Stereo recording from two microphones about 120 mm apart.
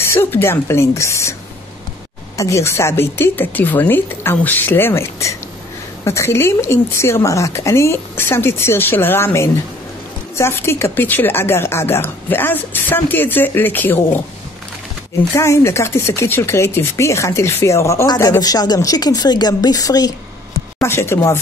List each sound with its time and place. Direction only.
0.0 s speech: 20° left (ahead or behind)
2.3 s a woman's voice: 25° left (ahead or behind)
15.3 s a woman's voice: 25° left (ahead or behind)
20.8 s speech: 20° left (ahead or behind)